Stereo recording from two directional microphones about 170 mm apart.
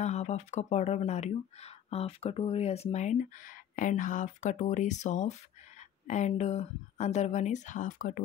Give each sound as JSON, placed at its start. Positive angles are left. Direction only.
{"t": 0.0, "sound": "speech", "side_deg": 40}